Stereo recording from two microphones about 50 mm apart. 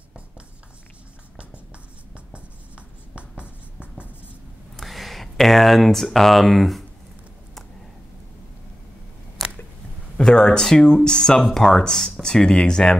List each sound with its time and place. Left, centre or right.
3.2 s writing: right
4.7 s speech: centre
10.1 s speech: centre